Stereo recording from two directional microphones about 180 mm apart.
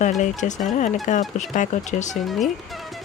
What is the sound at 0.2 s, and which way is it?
Speech, 45° left (ahead or behind).